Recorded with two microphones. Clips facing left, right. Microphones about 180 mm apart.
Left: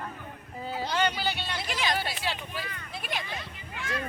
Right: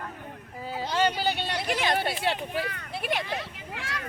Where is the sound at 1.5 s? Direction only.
55° right (ahead or behind); by 3.9 s 75° right (ahead or behind).